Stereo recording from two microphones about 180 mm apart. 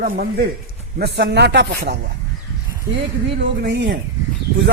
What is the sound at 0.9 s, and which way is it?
Speech, 70° right (ahead or behind).